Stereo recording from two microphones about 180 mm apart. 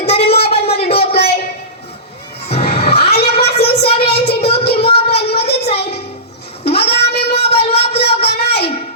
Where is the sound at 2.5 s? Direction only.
35° left (ahead or behind).